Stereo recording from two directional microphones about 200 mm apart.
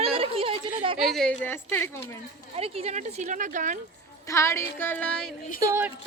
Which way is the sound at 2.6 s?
30° right (ahead or behind).